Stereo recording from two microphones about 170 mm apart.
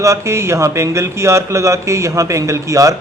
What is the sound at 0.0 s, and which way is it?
Speech, 15° right (ahead or behind).